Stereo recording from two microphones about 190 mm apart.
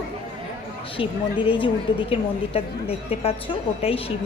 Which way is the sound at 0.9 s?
25° left (ahead or behind).